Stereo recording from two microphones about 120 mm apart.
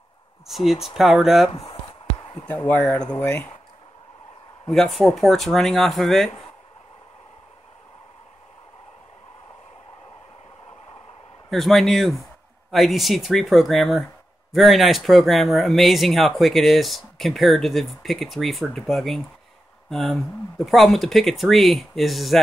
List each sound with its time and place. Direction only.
0.5 s speech: centre (ahead or behind)
1.7 s a sound: 40° left (ahead or behind)
2.7 s speech: 15° left (ahead or behind)
4.6 s speech: centre (ahead or behind)
11.5 s speech: centre (ahead or behind)